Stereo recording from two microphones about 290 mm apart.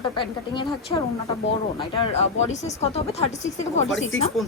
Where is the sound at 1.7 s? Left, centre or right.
Centre.